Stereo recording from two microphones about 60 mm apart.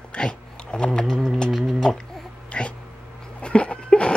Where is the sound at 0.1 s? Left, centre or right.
Centre.